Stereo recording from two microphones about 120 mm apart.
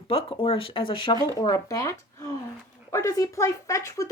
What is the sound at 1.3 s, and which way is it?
Speech, 30° left (ahead or behind).